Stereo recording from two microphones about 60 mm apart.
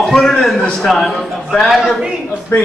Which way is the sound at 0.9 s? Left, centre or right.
Centre.